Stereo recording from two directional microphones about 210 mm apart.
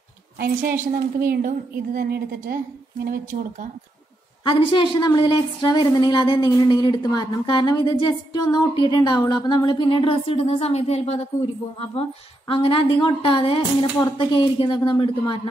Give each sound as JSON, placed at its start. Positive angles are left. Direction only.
{"t": 0.4, "sound": "a woman's voice", "side_deg": -45}
{"t": 4.5, "sound": "a woman's voice", "side_deg": 25}